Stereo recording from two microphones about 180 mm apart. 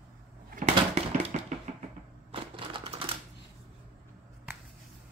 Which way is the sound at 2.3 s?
30° right (ahead or behind).